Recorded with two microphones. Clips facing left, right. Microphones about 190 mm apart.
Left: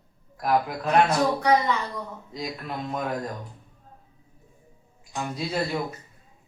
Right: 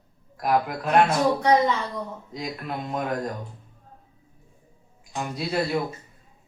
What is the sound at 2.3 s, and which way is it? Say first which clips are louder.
Speech: even; 5° right (ahead or behind).